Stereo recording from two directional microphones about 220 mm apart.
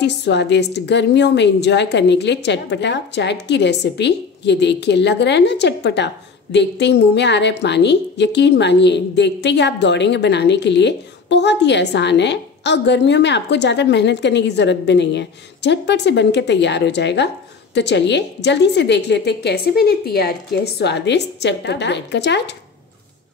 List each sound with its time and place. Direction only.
0.0 s a woman's voice: 50° left (ahead or behind)